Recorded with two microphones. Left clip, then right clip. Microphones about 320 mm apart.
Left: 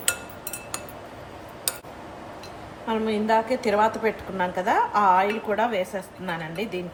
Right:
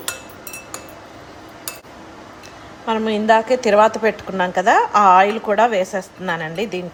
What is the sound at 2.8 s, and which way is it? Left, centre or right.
A woman's voice, right.